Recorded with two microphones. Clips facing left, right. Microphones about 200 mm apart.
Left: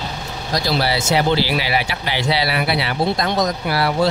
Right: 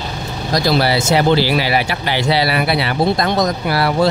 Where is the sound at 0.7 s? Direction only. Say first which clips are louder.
Right 2 dB; 50° right (ahead or behind).